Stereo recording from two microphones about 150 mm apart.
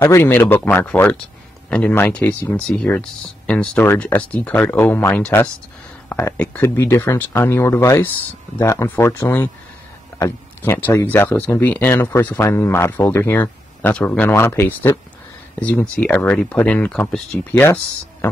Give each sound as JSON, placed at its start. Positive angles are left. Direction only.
{"t": 0.0, "sound": "speech", "side_deg": 15}